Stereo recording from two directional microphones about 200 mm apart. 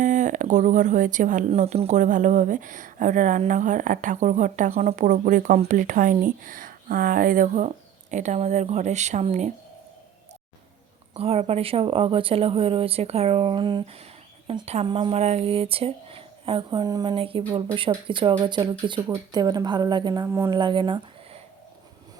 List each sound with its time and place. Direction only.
0.0 s speech: 40° right (ahead or behind)
11.1 s speech: 30° right (ahead or behind)